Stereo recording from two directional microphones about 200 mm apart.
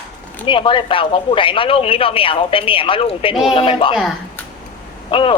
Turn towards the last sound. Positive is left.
turn(degrees=25)  # may be behind; listen again after turning